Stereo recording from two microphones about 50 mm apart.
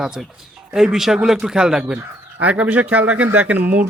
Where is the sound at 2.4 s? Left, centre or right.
Right.